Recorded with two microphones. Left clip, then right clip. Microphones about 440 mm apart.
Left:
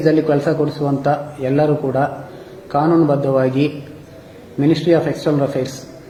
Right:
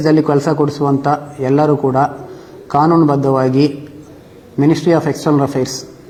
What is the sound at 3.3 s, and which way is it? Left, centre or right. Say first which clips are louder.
Speech: right 3 dB; right.